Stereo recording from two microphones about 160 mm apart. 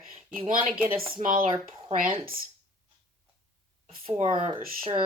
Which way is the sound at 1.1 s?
55° right (ahead or behind).